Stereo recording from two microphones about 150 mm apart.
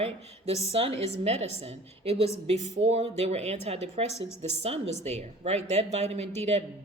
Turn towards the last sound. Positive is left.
turn(degrees=-45)  # may be behind; listen again after turning